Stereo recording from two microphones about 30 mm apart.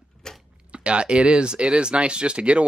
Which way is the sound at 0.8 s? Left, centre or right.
Right.